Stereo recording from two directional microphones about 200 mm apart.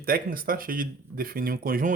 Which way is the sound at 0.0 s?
45° right (ahead or behind).